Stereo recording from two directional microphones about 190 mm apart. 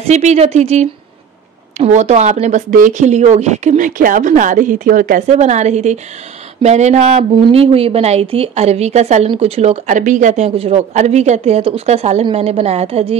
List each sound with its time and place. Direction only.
0.1 s speech: 35° right (ahead or behind)